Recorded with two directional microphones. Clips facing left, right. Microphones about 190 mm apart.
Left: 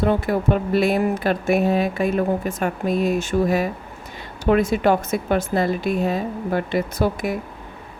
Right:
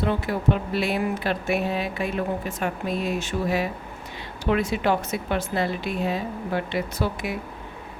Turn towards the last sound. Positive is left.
turn(degrees=45)  # may be behind; listen again after turning